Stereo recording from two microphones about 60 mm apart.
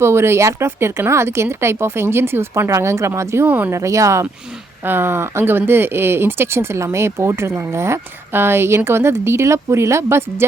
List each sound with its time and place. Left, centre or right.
0.0 s speech: right
3.4 s speech: right
3.7 s speech: right
4.8 s speech: right